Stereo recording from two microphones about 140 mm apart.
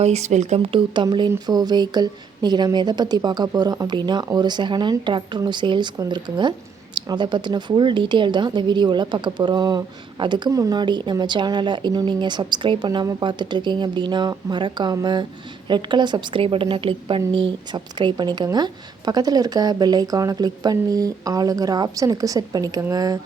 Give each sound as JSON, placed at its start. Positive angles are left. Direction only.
{"t": 0.0, "sound": "a woman's voice", "side_deg": -55}